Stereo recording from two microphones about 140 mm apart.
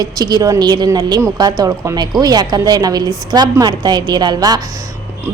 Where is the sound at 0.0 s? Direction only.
30° right (ahead or behind).